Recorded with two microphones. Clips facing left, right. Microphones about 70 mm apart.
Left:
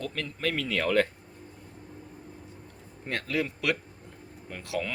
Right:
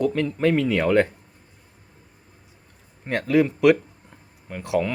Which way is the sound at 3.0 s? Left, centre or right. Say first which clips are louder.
Right 10 dB; centre.